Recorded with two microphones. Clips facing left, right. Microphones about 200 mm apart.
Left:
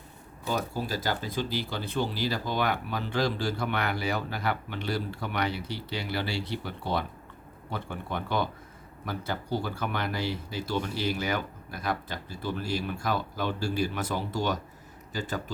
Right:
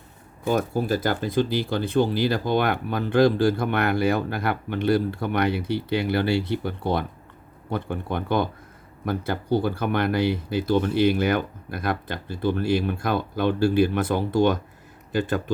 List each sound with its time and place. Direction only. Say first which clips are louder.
0.4 s speech: right 8 dB; 50° right (ahead or behind)